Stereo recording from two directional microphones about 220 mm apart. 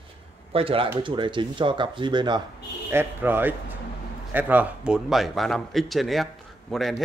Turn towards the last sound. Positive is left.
turn(degrees=0)  # may be behind; listen again after turning